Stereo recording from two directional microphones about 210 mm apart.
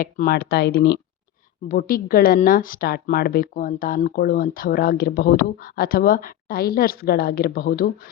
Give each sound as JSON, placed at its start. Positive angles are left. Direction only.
{"t": 0.0, "sound": "a woman's voice", "side_deg": 45}